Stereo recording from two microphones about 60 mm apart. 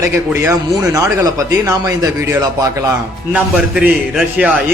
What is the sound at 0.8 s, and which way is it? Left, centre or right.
Speech, right.